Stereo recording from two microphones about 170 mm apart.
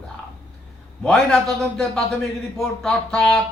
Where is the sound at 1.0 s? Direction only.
5° left (ahead or behind).